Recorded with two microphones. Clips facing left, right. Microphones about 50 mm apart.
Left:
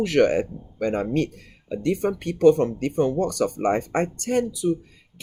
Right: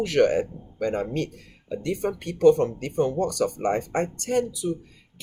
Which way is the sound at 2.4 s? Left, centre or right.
Left.